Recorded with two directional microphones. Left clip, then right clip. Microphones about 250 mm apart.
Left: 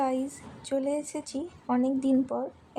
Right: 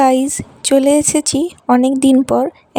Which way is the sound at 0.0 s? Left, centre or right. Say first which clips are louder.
Right 17 dB; right.